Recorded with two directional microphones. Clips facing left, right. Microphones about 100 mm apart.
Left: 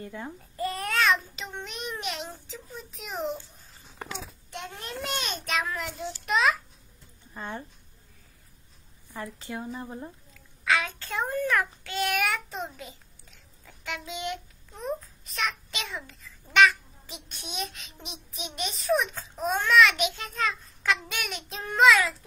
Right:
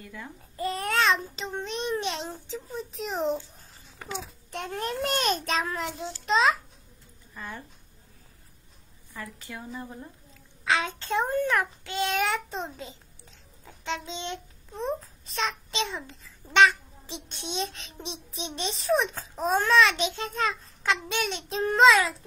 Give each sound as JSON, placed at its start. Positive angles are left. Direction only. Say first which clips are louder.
{"t": 0.0, "sound": "speech", "louder": "left 4 dB", "side_deg": 30}
{"t": 0.6, "sound": "babbling", "louder": "right 1 dB", "side_deg": -25}
{"t": 4.5, "sound": "a child's voice", "louder": "right 8 dB", "side_deg": -40}
{"t": 7.3, "sound": "a woman's voice", "louder": "left 3 dB", "side_deg": 30}
{"t": 9.1, "sound": "a woman's voice", "louder": "left 4 dB", "side_deg": 25}
{"t": 10.3, "sound": "a child's voice", "louder": "even", "side_deg": -25}